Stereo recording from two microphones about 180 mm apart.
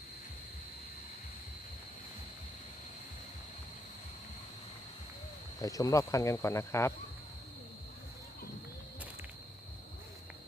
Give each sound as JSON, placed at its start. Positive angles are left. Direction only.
{"t": 5.5, "sound": "speech", "side_deg": 20}